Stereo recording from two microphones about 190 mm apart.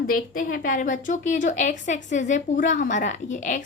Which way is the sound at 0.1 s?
50° left (ahead or behind).